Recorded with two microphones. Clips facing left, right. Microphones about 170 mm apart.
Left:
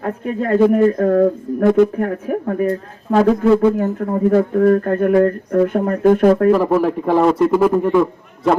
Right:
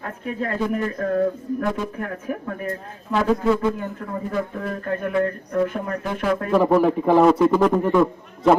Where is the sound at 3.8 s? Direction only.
45° left (ahead or behind).